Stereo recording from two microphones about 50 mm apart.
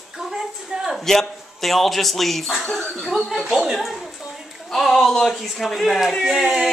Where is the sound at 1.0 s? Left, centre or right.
Centre.